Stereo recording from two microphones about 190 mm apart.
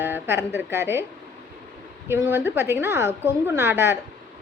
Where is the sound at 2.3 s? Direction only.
10° right (ahead or behind).